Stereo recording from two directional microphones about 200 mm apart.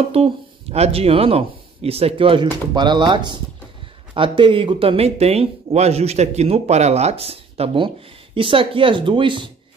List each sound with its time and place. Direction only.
0.1 s speech: 30° right (ahead or behind)